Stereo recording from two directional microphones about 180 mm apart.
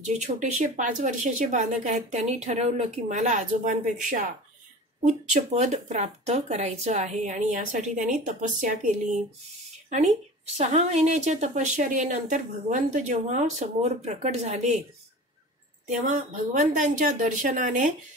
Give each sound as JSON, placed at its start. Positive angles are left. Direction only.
{"t": 0.0, "sound": "a woman's voice", "side_deg": -40}
{"t": 16.5, "sound": "speech", "side_deg": -45}